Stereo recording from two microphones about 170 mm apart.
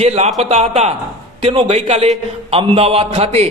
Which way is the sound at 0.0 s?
40° right (ahead or behind).